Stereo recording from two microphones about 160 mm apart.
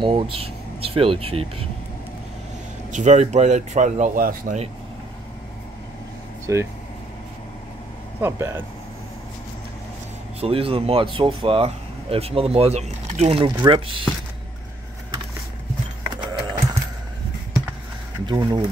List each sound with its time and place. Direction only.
0.0 s speech: 35° right (ahead or behind)
2.9 s speech: 50° right (ahead or behind)
6.4 s speech: 15° right (ahead or behind)
8.2 s speech: 15° right (ahead or behind)
10.4 s speech: 35° right (ahead or behind)
18.2 s speech: 25° right (ahead or behind)